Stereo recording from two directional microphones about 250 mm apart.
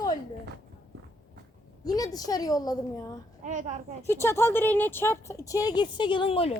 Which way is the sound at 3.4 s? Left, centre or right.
Right.